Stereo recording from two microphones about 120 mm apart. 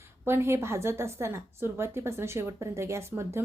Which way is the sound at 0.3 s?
20° right (ahead or behind).